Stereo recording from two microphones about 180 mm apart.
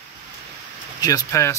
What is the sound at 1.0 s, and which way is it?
Speech, 20° left (ahead or behind).